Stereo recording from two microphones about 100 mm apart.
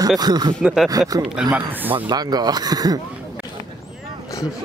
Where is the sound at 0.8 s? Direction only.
40° right (ahead or behind).